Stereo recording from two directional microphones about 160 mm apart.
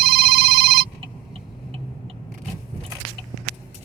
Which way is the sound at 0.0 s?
70° right (ahead or behind).